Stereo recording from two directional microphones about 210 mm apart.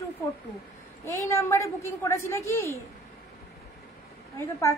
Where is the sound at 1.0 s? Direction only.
15° left (ahead or behind).